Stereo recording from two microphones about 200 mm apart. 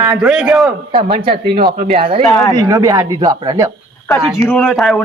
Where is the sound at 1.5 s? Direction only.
50° right (ahead or behind).